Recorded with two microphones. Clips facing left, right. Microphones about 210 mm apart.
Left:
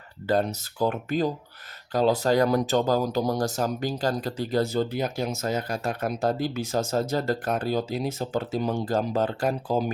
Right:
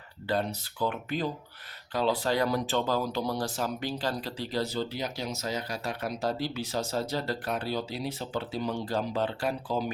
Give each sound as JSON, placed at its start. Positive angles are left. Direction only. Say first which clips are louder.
{"t": 0.3, "sound": "speech", "louder": "left 5 dB", "side_deg": 45}